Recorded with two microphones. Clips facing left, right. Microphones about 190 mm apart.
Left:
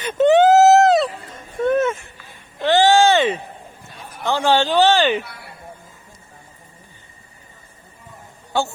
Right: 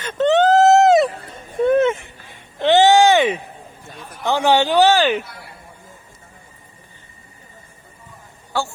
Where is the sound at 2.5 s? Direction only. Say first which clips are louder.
Right 2 dB; 20° right (ahead or behind).